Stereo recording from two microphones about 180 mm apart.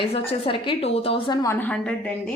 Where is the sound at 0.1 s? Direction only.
30° left (ahead or behind); by 2.0 s 10° left (ahead or behind).